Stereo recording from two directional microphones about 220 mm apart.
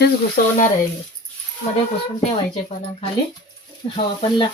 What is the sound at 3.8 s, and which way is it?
Speech, 25° left (ahead or behind).